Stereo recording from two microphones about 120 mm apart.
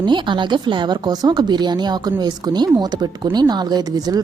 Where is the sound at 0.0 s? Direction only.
40° right (ahead or behind).